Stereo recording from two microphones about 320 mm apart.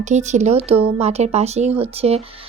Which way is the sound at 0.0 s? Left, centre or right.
Right.